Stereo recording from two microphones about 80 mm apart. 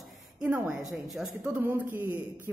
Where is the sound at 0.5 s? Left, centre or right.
Right.